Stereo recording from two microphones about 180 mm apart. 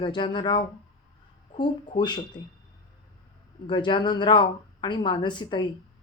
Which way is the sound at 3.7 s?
25° left (ahead or behind).